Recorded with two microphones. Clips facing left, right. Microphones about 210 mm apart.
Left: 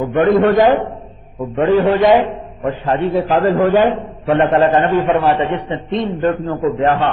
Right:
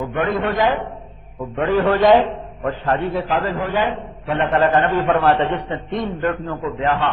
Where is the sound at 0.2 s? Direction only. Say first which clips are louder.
Left 9 dB; 40° left (ahead or behind).